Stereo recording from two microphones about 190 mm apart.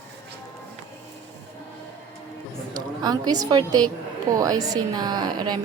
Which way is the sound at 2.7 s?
20° right (ahead or behind).